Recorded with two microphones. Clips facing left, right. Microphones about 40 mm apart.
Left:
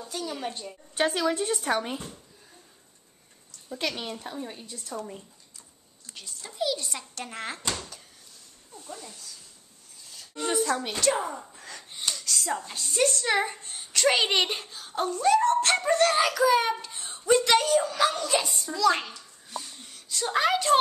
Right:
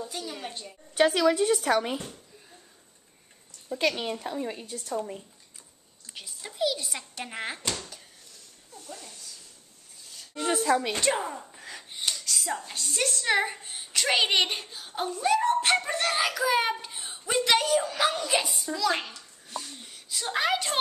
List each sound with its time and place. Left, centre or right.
0.0 s a woman's voice: centre
0.9 s child singing: centre
3.8 s a woman's voice: right
4.5 s a woman's voice: right
4.8 s speech: centre
8.7 s speech: centre
10.7 s speech: centre
15.8 s child singing: centre
16.8 s a sound: centre
17.3 s speech: centre
18.5 s a sound: centre